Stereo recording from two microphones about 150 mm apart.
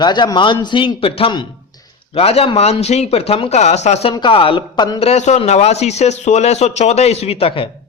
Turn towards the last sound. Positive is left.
turn(degrees=35)  # may be behind; listen again after turning